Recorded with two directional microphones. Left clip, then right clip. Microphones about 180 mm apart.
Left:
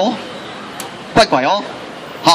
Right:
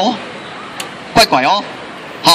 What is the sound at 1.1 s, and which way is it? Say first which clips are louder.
Speech: right 2 dB; 30° right (ahead or behind).